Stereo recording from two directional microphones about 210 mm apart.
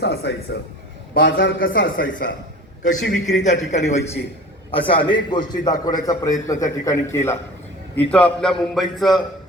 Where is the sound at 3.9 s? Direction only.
30° left (ahead or behind); by 9.1 s centre (ahead or behind).